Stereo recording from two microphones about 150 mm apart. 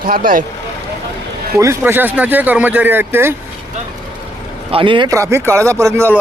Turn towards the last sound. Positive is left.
turn(degrees=-15)  # may be behind; listen again after turning